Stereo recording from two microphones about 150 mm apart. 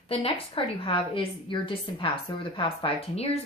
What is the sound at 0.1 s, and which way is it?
A woman's voice, 40° left (ahead or behind).